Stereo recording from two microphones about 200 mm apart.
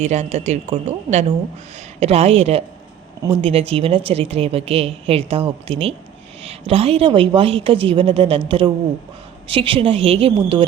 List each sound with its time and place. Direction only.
0.0 s a woman's voice: 35° right (ahead or behind)